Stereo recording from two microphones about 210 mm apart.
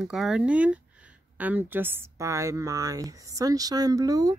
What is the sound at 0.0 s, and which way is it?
A woman's voice, centre (ahead or behind).